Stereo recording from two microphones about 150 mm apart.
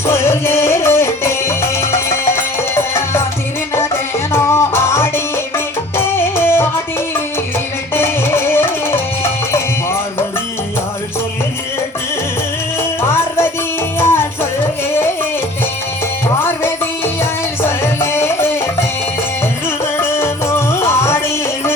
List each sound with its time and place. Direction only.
0.0 s music: 15° left (ahead or behind)
7.9 s music: 15° left (ahead or behind)
13.0 s music: 15° left (ahead or behind)
16.4 s music: 15° left (ahead or behind)